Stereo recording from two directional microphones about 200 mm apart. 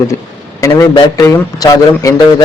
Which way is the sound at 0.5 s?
15° left (ahead or behind).